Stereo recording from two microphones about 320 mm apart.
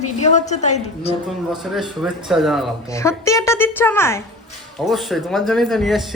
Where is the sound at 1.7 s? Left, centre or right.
Centre.